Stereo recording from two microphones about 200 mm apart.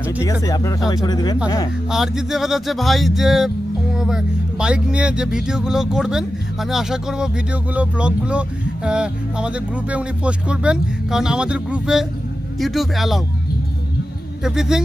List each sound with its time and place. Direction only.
0.2 s speech: 15° left (ahead or behind)
1.9 s speech: 5° right (ahead or behind)
14.4 s speech: centre (ahead or behind)